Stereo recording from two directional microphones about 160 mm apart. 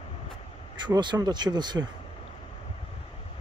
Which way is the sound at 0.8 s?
30° right (ahead or behind).